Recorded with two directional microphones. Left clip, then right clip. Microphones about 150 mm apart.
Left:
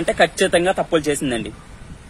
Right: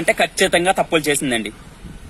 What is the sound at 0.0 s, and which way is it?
A man's voice, centre (ahead or behind).